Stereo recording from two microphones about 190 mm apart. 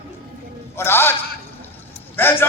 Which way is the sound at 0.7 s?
10° left (ahead or behind).